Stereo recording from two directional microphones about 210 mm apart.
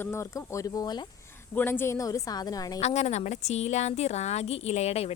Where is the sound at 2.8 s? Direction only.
30° left (ahead or behind).